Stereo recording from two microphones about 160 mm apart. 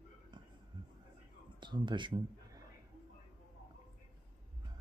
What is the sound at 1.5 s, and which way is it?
A man's voice, 30° right (ahead or behind).